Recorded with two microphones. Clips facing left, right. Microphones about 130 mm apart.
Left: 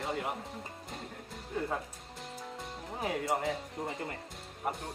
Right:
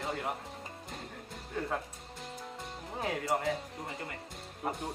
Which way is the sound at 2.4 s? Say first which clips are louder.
Left 1 dB; centre (ahead or behind).